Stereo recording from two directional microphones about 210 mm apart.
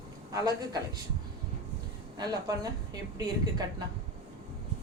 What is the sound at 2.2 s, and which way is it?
Speech, 20° right (ahead or behind).